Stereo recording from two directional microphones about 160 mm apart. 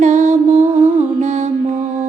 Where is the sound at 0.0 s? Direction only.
50° right (ahead or behind).